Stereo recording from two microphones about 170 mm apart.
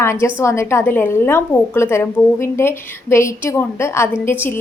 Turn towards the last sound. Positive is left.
turn(degrees=15)  # may be behind; listen again after turning